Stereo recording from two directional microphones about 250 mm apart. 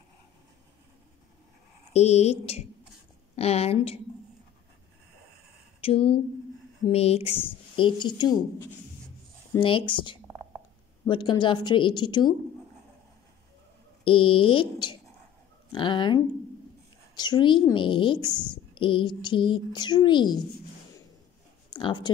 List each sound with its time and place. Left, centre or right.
1.9 s speech: left
5.8 s a woman's voice: left
14.0 s a woman's voice: left
21.6 s a sound: centre